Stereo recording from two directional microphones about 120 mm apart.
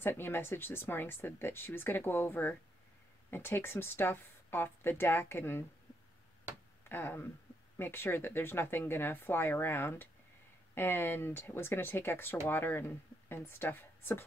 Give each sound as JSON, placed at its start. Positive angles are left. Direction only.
{"t": 0.0, "sound": "speech", "side_deg": 20}
{"t": 6.9, "sound": "speech", "side_deg": 20}